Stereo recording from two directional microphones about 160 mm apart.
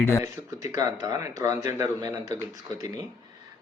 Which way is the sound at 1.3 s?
20° right (ahead or behind).